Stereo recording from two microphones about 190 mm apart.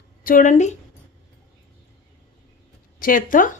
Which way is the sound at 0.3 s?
45° left (ahead or behind).